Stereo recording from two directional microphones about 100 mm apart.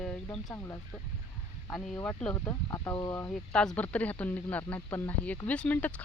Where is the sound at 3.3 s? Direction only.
5° left (ahead or behind).